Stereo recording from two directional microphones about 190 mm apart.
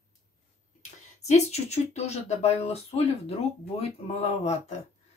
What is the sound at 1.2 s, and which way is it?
Speech, 35° left (ahead or behind).